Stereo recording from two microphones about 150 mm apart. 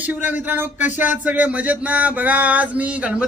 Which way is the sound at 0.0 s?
10° right (ahead or behind).